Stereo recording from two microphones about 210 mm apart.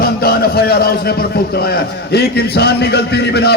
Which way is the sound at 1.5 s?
45° left (ahead or behind).